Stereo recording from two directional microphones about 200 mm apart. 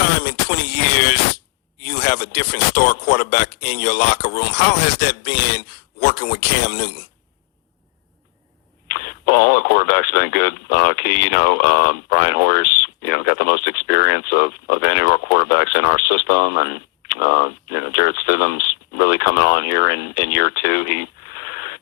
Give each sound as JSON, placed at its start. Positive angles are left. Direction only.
{"t": 0.3, "sound": "a sound", "side_deg": 55}
{"t": 1.8, "sound": "speech", "side_deg": 55}
{"t": 8.9, "sound": "speech", "side_deg": 50}